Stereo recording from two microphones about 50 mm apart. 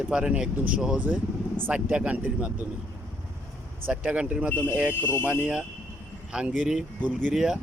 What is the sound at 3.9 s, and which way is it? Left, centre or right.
Speech, right.